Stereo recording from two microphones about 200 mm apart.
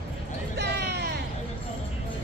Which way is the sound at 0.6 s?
55° right (ahead or behind).